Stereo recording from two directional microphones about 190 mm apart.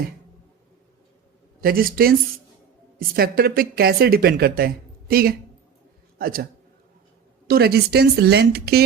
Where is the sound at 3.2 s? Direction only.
50° right (ahead or behind).